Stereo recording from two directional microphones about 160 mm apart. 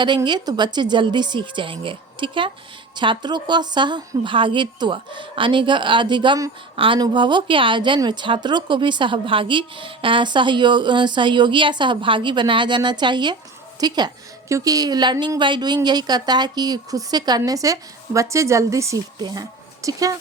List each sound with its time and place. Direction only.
0.2 s a woman's voice: 25° right (ahead or behind)